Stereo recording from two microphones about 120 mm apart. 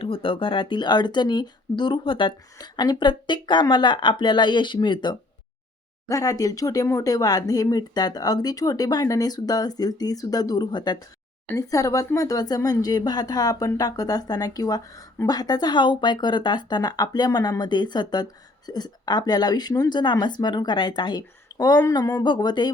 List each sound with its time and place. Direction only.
0.0 s speech: 50° left (ahead or behind)
6.1 s speech: 30° left (ahead or behind)